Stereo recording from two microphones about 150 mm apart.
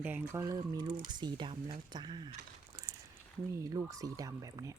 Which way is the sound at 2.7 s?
25° right (ahead or behind).